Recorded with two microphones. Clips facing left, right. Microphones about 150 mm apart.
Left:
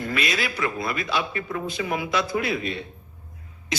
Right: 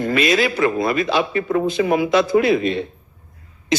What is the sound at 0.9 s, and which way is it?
Speech, 90° right.